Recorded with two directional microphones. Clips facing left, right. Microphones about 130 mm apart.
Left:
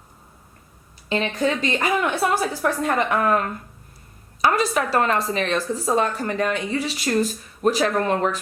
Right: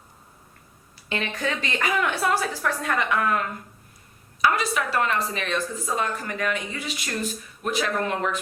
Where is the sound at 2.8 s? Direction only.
35° left (ahead or behind).